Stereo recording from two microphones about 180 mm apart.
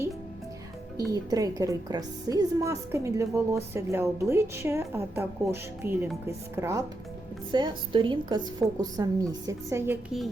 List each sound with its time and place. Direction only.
0.9 s a woman's voice: 20° right (ahead or behind)